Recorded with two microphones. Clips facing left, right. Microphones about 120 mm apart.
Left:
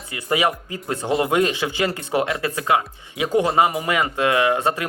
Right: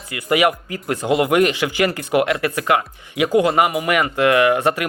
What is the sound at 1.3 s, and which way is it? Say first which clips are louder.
Speech: right 3 dB; 25° left (ahead or behind).